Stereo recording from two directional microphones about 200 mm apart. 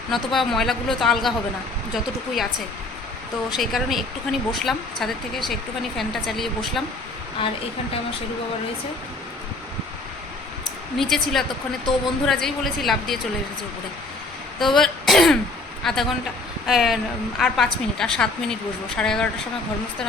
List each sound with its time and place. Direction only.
0.1 s speech: centre (ahead or behind)
3.5 s speech: centre (ahead or behind)
7.4 s a woman's voice: 25° left (ahead or behind)
10.9 s speech: centre (ahead or behind)
14.6 s throat clearing: centre (ahead or behind)
15.8 s speech: centre (ahead or behind)